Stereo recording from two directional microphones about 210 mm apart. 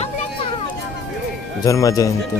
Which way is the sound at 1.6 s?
15° left (ahead or behind).